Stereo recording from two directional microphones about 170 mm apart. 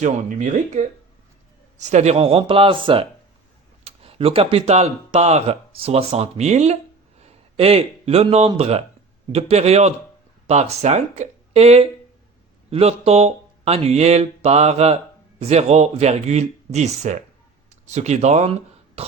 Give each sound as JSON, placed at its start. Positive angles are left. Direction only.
{"t": 0.0, "sound": "speech", "side_deg": -45}
{"t": 19.0, "sound": "cough", "side_deg": -35}